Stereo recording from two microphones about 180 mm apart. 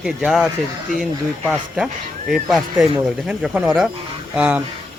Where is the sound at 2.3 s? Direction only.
Centre (ahead or behind).